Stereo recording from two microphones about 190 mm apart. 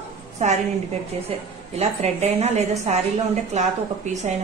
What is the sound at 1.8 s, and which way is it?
Speech, 35° right (ahead or behind).